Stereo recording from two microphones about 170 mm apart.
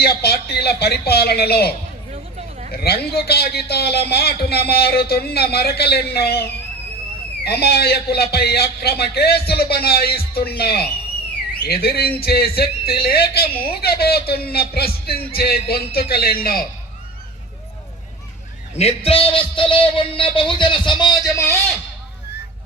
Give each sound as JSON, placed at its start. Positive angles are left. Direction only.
{"t": 0.0, "sound": "speech", "side_deg": 65}
{"t": 2.7, "sound": "a man's voice", "side_deg": 70}
{"t": 18.8, "sound": "a man's voice", "side_deg": 35}